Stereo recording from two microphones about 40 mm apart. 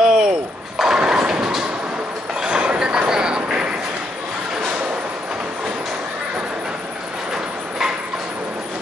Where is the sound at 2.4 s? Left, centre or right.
Right.